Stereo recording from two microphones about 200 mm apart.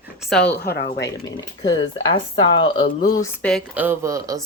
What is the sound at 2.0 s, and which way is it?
Speech, 25° left (ahead or behind).